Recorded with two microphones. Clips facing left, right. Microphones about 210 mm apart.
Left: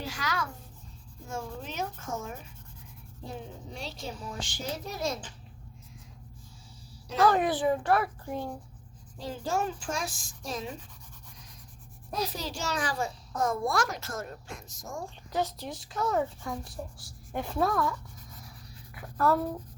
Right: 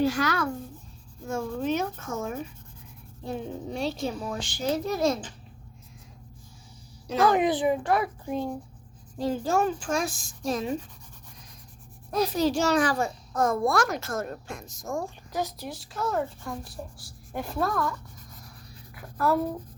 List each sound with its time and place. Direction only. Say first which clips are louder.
0.1 s a child's voice: right 8 dB; 60° right (ahead or behind); by 2.4 s 80° right
3.3 s a child's voice: right 10 dB; 60° right (ahead or behind)
7.2 s speech: right 2 dB; 15° right (ahead or behind)
9.1 s a woman's voice: right 6 dB; 50° right (ahead or behind)
12.1 s a child's voice: right 10 dB; 55° right (ahead or behind)
15.4 s speech: even; 10° right (ahead or behind)
19.2 s speech: right 1 dB; 10° right (ahead or behind)